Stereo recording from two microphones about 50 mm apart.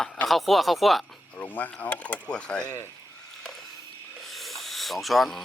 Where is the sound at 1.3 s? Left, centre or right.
Left; by 2.6 s centre.